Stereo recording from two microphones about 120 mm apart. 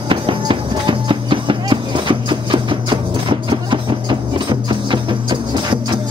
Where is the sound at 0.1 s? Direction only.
45° right (ahead or behind).